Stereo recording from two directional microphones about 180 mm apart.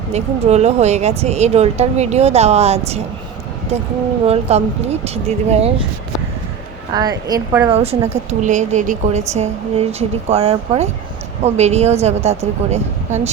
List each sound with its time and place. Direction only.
0.1 s speech: 35° right (ahead or behind)
4.3 s speech: 35° right (ahead or behind)
6.9 s a woman's voice: 20° right (ahead or behind)
7.7 s speech: 35° right (ahead or behind)